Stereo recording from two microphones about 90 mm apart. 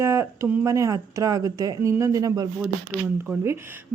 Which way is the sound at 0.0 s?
30° right (ahead or behind).